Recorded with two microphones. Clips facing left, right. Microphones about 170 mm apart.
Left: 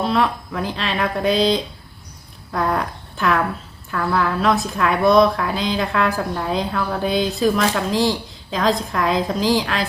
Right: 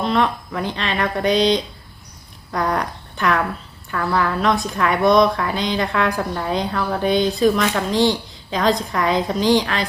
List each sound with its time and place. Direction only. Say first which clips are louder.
0.0 s speech: even; 5° left (ahead or behind)